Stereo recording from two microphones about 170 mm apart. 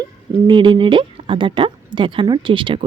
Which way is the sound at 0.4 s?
30° right (ahead or behind).